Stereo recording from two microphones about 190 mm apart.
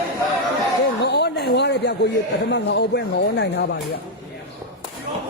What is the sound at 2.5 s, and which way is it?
Speech, 70° left (ahead or behind).